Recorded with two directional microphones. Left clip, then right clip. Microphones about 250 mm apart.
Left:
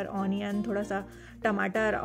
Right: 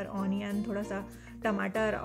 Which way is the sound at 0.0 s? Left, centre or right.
Left.